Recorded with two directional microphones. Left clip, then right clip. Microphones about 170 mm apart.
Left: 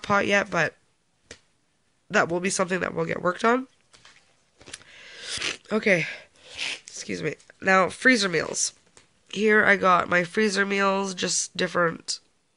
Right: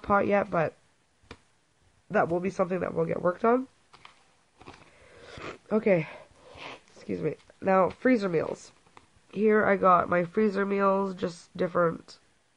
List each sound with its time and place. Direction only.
0.0 s speech: 25° left (ahead or behind)
2.0 s speech: 45° left (ahead or behind)
5.0 s a sound: 25° left (ahead or behind)
9.3 s speech: 25° left (ahead or behind)